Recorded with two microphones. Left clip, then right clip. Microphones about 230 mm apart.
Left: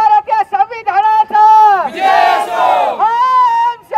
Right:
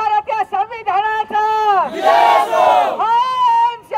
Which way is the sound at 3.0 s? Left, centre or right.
Left.